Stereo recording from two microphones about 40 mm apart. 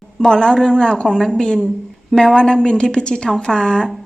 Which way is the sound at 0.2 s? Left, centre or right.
Centre.